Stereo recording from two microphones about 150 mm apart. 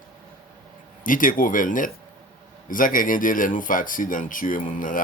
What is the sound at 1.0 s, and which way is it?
Speech, 65° left (ahead or behind).